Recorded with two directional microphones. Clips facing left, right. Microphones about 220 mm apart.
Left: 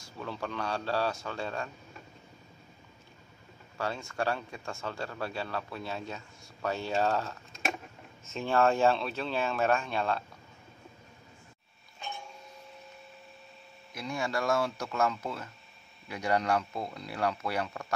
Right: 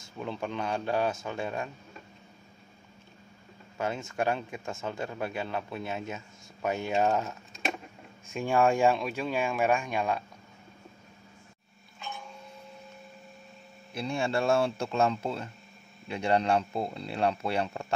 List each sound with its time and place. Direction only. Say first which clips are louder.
0.0 s speech: right 3 dB; 20° right (ahead or behind)
3.7 s speech: right 2 dB; 20° right (ahead or behind)
13.9 s speech: right 4 dB; 30° right (ahead or behind)